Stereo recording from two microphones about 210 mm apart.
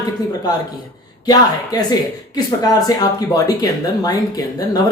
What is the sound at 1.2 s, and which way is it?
Speech, 20° left (ahead or behind).